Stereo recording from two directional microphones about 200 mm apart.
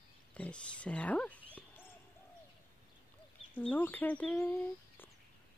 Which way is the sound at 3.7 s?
10° left (ahead or behind).